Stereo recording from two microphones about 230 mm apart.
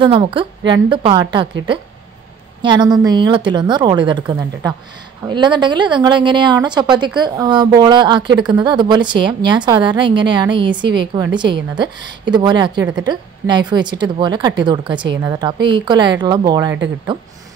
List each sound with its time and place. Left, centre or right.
0.0 s a woman's voice: right